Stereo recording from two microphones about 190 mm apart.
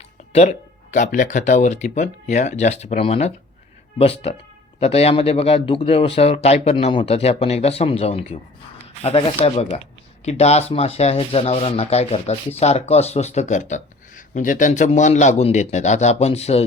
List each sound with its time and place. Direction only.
0.3 s speech: 40° left (ahead or behind)